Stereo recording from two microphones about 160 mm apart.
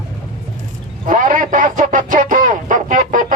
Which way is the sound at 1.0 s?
55° right (ahead or behind).